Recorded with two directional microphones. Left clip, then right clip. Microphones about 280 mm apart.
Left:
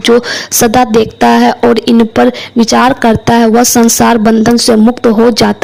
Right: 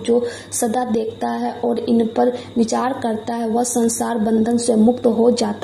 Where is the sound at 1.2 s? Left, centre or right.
Left.